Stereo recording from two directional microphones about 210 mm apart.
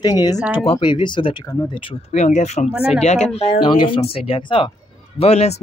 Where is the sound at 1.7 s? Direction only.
30° left (ahead or behind).